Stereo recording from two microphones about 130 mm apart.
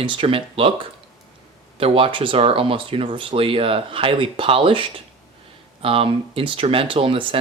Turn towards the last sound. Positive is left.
turn(degrees=-40)  # may be behind; listen again after turning